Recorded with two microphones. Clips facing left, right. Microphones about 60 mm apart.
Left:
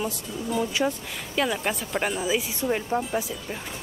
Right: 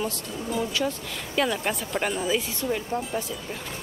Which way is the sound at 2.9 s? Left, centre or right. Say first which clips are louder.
Left 2 dB; centre.